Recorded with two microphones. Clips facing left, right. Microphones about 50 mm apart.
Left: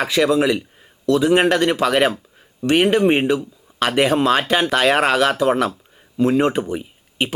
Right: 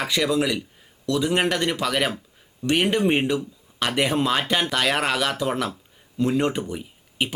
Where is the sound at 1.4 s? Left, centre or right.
Left.